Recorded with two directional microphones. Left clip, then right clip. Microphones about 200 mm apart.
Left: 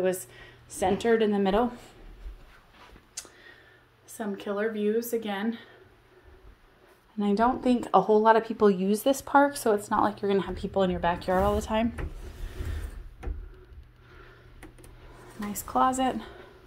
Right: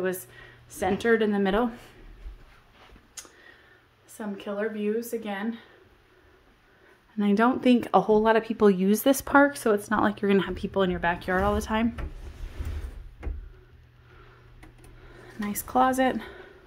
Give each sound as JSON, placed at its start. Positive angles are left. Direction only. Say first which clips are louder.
{"t": 0.0, "sound": "speech", "louder": "left 2 dB", "side_deg": -10}
{"t": 4.2, "sound": "speech", "louder": "left 1 dB", "side_deg": 10}
{"t": 7.2, "sound": "a woman's voice", "louder": "right 2 dB", "side_deg": -30}
{"t": 7.4, "sound": "a woman's voice", "louder": "right 3 dB", "side_deg": -40}
{"t": 7.9, "sound": "speech", "louder": "left 2 dB", "side_deg": -25}
{"t": 9.8, "sound": "speech", "louder": "even", "side_deg": -75}
{"t": 10.4, "sound": "speech", "louder": "right 1 dB", "side_deg": -35}
{"t": 15.4, "sound": "a woman's voice", "louder": "right 2 dB", "side_deg": -30}